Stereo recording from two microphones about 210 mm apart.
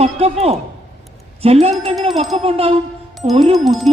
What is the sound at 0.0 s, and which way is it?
A woman's voice, 30° right (ahead or behind).